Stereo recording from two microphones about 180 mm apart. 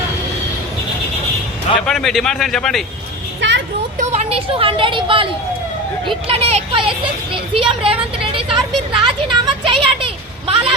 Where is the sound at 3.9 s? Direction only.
35° right (ahead or behind).